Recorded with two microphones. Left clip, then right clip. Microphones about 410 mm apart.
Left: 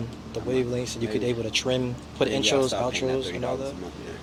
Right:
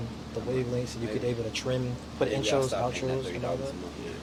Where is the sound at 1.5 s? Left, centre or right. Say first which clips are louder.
Left 6 dB; left.